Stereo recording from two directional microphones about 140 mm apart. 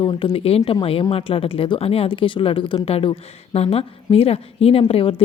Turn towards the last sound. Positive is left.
turn(degrees=40)  # may be behind; listen again after turning